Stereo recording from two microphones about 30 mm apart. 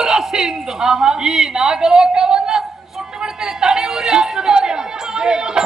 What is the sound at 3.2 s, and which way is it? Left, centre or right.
Chatter, right.